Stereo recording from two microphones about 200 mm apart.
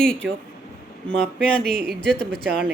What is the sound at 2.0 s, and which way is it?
Speech, 5° left (ahead or behind).